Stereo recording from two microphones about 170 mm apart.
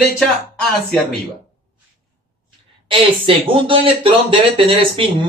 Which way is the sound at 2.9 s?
30° right (ahead or behind).